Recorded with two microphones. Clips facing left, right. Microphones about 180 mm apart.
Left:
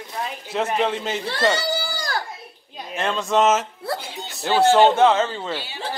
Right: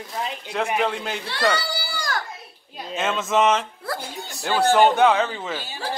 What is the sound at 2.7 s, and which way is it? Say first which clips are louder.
Speech: even; centre (ahead or behind).